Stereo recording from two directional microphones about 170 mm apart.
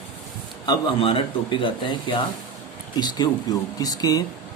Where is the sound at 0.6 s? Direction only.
30° left (ahead or behind).